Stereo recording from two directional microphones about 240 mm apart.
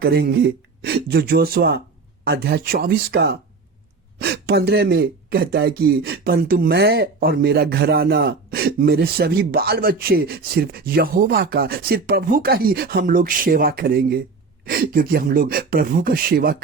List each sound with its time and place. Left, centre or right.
0.0 s speech: right